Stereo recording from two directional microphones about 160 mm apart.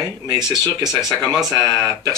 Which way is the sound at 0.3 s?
25° right (ahead or behind).